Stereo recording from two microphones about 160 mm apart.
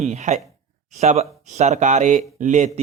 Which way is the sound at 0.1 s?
45° right (ahead or behind).